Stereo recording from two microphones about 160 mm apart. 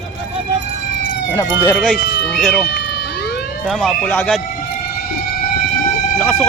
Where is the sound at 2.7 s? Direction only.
90° left.